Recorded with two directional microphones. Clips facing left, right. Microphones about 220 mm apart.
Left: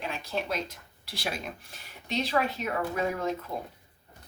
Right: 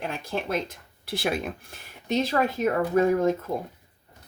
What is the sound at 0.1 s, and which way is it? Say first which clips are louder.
A woman's voice: right 3 dB; 50° right (ahead or behind).